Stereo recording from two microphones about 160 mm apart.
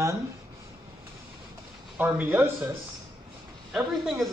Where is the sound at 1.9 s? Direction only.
10° right (ahead or behind).